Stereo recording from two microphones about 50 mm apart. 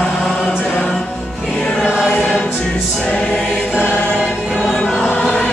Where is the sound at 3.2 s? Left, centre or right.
Left.